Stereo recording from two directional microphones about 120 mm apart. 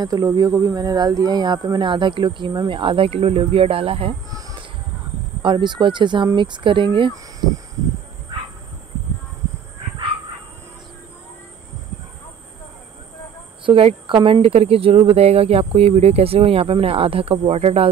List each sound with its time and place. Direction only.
0.0 s speech: 30° right (ahead or behind); by 4.1 s 50° right (ahead or behind)
4.3 s a sound: 30° right (ahead or behind)
5.4 s speech: 40° right (ahead or behind)
8.3 s dog: 40° right (ahead or behind)
13.7 s speech: 50° right (ahead or behind)